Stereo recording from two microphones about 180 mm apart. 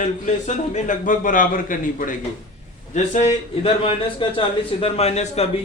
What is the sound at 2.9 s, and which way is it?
A man's voice, 35° left (ahead or behind).